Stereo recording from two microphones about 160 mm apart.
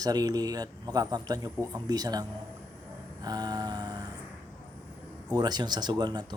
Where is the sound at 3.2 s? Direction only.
25° right (ahead or behind).